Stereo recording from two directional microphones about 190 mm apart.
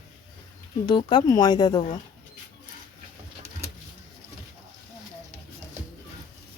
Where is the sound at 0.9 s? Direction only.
25° left (ahead or behind).